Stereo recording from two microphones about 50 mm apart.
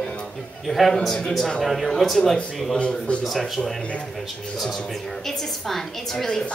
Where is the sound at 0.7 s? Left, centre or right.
Centre.